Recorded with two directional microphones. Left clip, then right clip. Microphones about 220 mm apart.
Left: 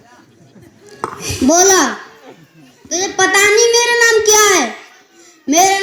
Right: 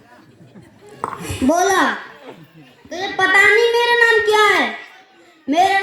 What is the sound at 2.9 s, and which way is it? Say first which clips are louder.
Child singing: left 2 dB; 55° left (ahead or behind).